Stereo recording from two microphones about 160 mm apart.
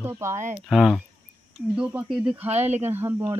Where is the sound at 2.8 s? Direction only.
15° right (ahead or behind).